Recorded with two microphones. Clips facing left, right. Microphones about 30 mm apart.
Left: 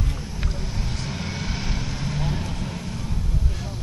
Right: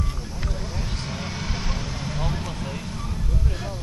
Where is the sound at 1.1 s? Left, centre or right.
Centre.